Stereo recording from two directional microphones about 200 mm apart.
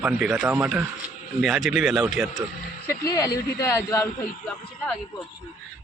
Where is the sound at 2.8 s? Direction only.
15° left (ahead or behind).